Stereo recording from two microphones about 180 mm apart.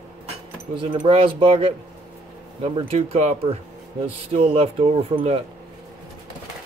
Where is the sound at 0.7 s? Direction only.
30° right (ahead or behind).